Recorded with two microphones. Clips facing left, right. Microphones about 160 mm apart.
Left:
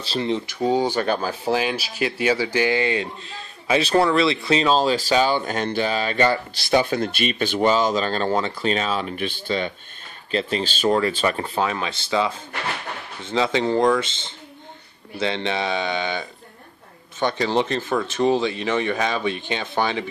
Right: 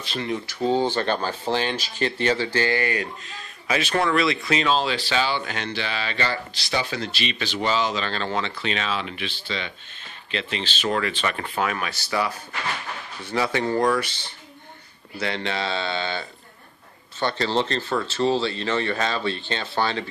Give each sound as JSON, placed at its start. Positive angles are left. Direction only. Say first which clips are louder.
{"t": 0.0, "sound": "speech", "louder": "left 4 dB", "side_deg": 30}
{"t": 0.6, "sound": "speech", "louder": "even", "side_deg": 15}